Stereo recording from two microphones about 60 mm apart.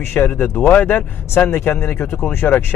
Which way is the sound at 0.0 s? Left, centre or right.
Left.